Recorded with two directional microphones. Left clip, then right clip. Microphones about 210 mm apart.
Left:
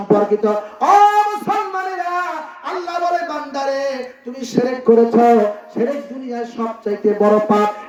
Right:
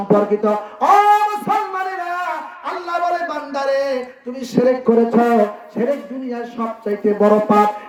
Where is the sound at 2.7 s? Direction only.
5° right (ahead or behind).